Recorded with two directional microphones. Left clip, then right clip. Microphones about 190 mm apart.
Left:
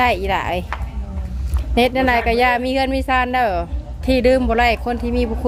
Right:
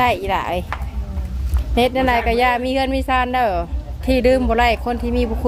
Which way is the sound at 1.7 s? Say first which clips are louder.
Left 1 dB; 10° left (ahead or behind).